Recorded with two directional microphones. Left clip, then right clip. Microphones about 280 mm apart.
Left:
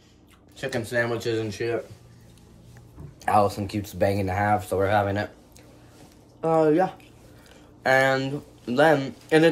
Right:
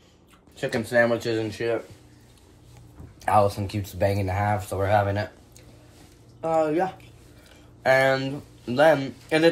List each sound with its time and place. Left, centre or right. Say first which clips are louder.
0.6 s speech: right 4 dB; centre
3.2 s speech: right 1 dB; centre
6.4 s speech: left 2 dB; centre